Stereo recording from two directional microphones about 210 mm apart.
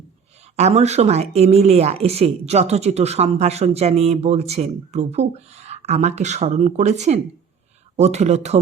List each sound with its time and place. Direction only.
0.5 s speech: 30° right (ahead or behind)